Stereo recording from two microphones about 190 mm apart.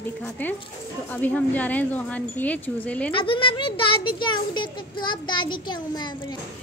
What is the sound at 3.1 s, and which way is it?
Speech, 25° left (ahead or behind).